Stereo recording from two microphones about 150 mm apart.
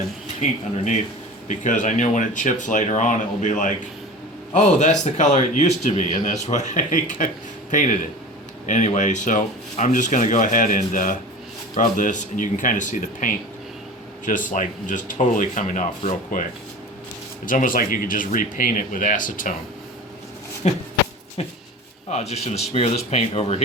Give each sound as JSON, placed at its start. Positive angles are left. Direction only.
{"t": 1.5, "sound": "speech", "side_deg": 55}
{"t": 17.4, "sound": "speech", "side_deg": 65}
{"t": 20.6, "sound": "speech", "side_deg": 50}